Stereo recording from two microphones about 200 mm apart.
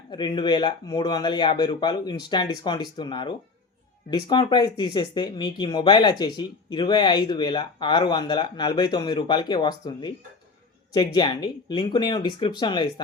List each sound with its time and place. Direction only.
0.1 s speech: 20° left (ahead or behind)